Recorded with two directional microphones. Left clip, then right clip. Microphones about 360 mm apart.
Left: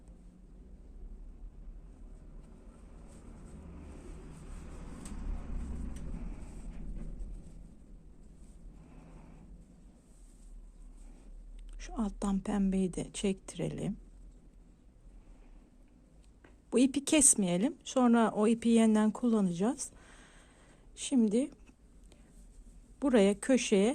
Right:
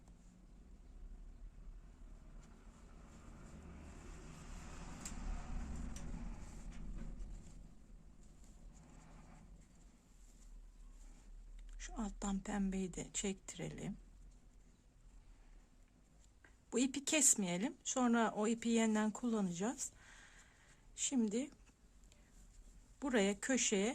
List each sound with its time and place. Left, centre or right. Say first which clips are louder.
11.8 s a woman's voice: left 8 dB; centre
16.4 s a woman's voice: left 10 dB; centre
23.0 s a woman's voice: left 9 dB; centre